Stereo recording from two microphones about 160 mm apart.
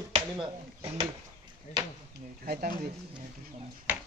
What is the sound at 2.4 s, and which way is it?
Speech, 70° right (ahead or behind).